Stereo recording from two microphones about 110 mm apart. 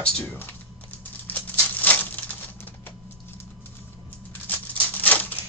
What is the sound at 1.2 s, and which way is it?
Patter, 15° left (ahead or behind).